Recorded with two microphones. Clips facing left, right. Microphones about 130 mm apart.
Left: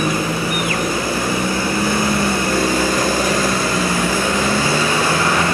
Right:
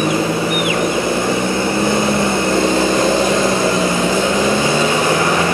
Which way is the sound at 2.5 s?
20° right (ahead or behind).